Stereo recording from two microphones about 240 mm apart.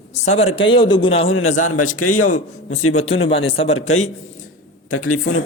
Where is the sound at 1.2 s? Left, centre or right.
Left.